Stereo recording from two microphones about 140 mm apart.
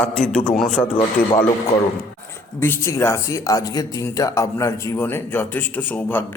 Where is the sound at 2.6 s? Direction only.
20° left (ahead or behind).